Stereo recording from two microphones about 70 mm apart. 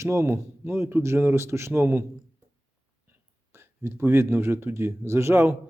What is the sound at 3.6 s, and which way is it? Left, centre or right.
A man's voice, right.